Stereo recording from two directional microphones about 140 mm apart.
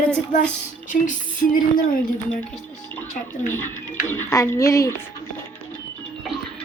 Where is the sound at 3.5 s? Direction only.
15° left (ahead or behind).